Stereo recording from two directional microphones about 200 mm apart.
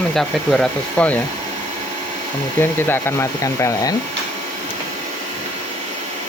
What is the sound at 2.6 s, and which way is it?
Speech, 10° left (ahead or behind).